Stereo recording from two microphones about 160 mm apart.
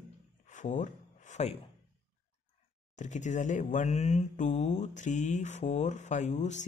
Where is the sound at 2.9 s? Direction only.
50° left (ahead or behind).